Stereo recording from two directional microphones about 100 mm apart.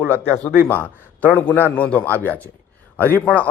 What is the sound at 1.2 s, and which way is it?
A man's voice, 15° left (ahead or behind).